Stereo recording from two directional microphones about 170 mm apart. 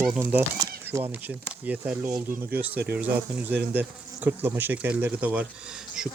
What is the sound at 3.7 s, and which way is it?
Speech, 10° right (ahead or behind).